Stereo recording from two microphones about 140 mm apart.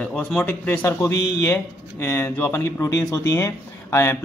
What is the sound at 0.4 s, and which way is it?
Speech, 15° left (ahead or behind).